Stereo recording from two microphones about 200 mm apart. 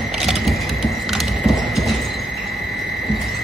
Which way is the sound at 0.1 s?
Centre (ahead or behind).